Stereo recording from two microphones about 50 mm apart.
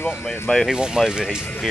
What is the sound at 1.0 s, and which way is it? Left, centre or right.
Speech, centre.